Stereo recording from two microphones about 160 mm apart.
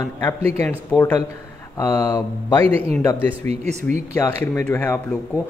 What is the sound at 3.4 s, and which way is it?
Speech, 45° right (ahead or behind).